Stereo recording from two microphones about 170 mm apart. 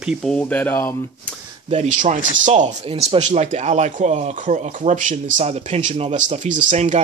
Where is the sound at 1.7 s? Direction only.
45° right (ahead or behind).